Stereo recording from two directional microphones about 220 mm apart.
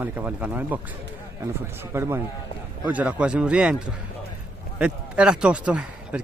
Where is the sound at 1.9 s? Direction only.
10° right (ahead or behind).